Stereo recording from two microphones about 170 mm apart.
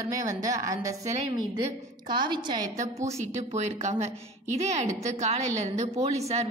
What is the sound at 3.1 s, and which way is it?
A woman's voice, 40° right (ahead or behind).